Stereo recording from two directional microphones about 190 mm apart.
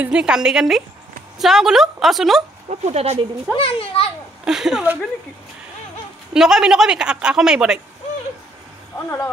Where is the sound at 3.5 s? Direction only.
30° left (ahead or behind).